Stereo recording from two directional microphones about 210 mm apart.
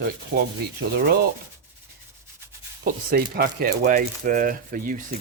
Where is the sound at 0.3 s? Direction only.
40° right (ahead or behind).